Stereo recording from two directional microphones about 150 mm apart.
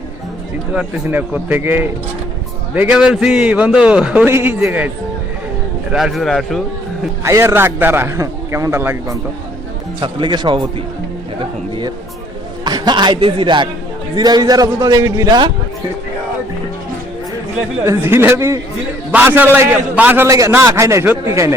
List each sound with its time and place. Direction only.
1.0 s a man's voice: 10° right (ahead or behind)
5.9 s a man's voice: 5° right (ahead or behind)
7.3 s a man's voice: 15° right (ahead or behind)
10.0 s speech: 30° right (ahead or behind)
12.6 s a man's voice: 30° right (ahead or behind)
17.8 s a man's voice: 15° right (ahead or behind)